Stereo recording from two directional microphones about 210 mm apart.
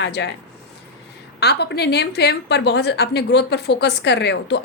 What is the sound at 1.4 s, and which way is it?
A woman's voice, 50° left (ahead or behind).